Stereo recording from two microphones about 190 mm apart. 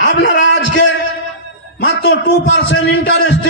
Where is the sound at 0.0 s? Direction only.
70° left (ahead or behind).